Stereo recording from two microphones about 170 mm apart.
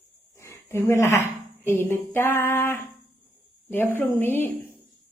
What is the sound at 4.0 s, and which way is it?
Female singing, 10° left (ahead or behind).